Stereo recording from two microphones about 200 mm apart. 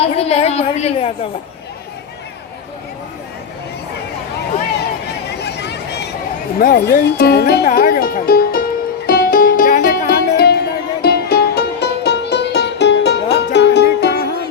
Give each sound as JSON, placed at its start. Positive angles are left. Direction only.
{"t": 0.0, "sound": "a woman's voice", "side_deg": 30}
{"t": 5.4, "sound": "a sound", "side_deg": 55}
{"t": 6.6, "sound": "music", "side_deg": 50}